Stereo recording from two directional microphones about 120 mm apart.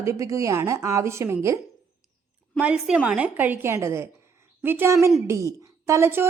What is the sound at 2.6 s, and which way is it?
A woman's voice, 10° right (ahead or behind).